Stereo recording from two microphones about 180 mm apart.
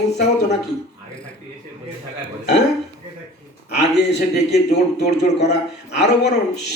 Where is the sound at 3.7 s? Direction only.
70° left (ahead or behind).